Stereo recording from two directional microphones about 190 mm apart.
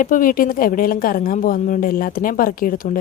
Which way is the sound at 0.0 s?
45° left (ahead or behind).